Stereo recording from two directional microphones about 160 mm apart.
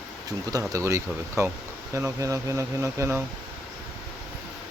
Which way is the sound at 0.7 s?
20° right (ahead or behind).